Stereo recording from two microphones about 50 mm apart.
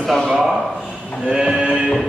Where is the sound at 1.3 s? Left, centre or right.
Centre.